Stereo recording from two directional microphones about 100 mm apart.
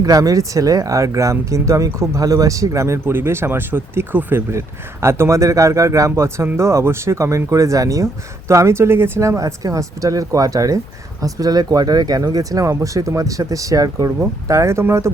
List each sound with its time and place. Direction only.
0.0 s speech: 35° right (ahead or behind)